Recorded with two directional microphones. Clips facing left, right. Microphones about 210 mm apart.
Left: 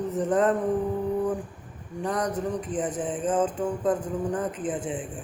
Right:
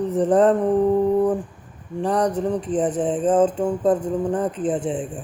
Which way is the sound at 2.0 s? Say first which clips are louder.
Right 7 dB; 30° right (ahead or behind).